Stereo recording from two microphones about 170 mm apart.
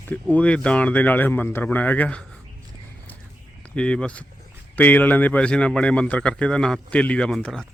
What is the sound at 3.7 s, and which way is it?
Speech, 5° left (ahead or behind).